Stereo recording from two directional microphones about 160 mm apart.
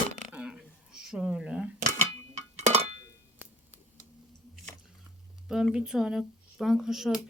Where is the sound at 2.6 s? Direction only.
40° right (ahead or behind).